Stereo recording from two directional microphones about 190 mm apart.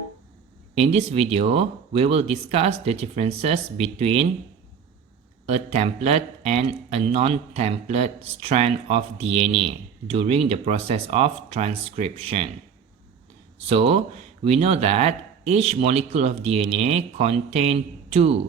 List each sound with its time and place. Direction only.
0.8 s speech: 35° right (ahead or behind)
5.5 s speech: 35° right (ahead or behind)
13.7 s speech: 30° right (ahead or behind)